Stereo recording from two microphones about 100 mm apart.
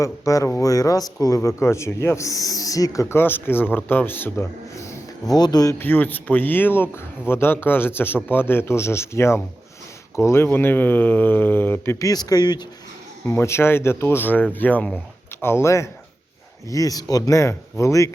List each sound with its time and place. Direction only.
0.0 s speech: 30° left (ahead or behind)
5.3 s speech: 40° left (ahead or behind)
5.8 s speech: 20° left (ahead or behind)
11.9 s speech: 40° left (ahead or behind)
13.2 s speech: 25° left (ahead or behind)